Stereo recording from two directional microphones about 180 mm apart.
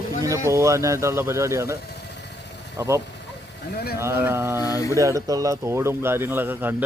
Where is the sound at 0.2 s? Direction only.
15° right (ahead or behind).